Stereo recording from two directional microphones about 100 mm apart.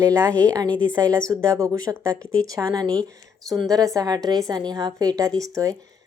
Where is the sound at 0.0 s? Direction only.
30° right (ahead or behind).